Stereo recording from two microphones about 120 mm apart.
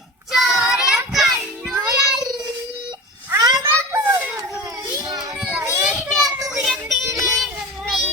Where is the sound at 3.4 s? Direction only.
30° right (ahead or behind).